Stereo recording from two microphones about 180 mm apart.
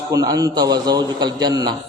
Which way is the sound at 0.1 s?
20° right (ahead or behind).